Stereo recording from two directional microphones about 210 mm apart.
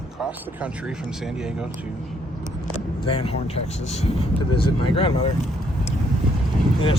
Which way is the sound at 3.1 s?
25° left (ahead or behind).